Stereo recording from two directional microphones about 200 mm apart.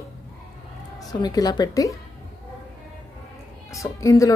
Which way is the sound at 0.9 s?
20° left (ahead or behind).